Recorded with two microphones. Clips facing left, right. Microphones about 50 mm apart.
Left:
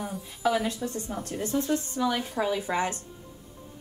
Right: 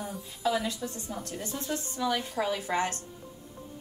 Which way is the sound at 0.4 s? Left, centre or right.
Left.